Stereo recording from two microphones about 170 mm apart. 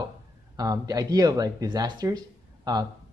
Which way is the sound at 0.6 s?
20° right (ahead or behind).